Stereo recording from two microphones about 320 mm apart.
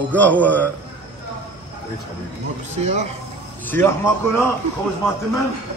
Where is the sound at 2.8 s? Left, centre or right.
Centre.